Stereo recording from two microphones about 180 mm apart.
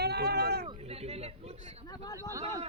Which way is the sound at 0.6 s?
30° right (ahead or behind).